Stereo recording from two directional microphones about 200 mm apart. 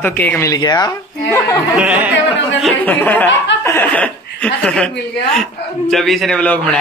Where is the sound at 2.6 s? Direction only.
10° left (ahead or behind).